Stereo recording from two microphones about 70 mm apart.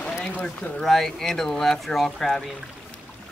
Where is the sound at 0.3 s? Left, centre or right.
Left.